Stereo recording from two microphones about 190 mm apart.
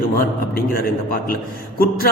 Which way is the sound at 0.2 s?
50° left (ahead or behind).